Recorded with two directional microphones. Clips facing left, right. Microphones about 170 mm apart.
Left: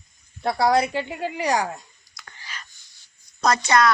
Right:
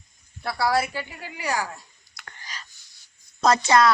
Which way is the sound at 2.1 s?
45° right (ahead or behind).